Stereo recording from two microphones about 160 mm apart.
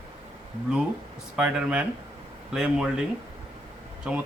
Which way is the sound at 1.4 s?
5° right (ahead or behind).